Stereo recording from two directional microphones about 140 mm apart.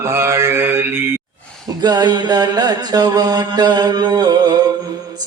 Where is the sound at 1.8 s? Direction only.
30° right (ahead or behind).